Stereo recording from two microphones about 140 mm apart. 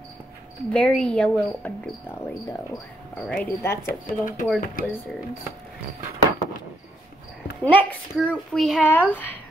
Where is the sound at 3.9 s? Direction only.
75° left (ahead or behind).